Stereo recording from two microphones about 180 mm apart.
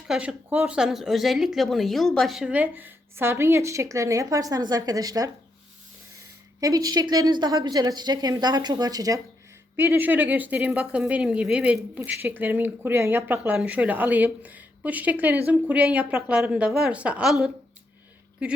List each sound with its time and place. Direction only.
0.1 s speech: 5° right (ahead or behind)
6.6 s a woman's voice: 20° right (ahead or behind); by 17.5 s centre (ahead or behind)